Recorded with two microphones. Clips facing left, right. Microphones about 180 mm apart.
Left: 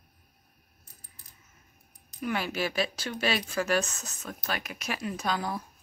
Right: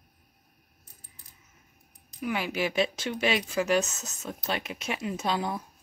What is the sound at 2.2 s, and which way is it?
A woman's voice, 15° right (ahead or behind).